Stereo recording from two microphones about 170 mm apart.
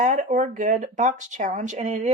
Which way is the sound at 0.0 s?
45° right (ahead or behind).